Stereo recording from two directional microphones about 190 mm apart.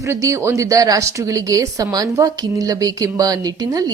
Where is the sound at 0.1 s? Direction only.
15° right (ahead or behind).